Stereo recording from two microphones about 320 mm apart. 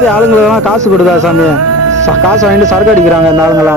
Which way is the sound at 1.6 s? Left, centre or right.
Right.